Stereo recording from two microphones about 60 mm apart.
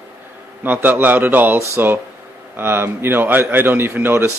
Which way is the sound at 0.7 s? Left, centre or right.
Right.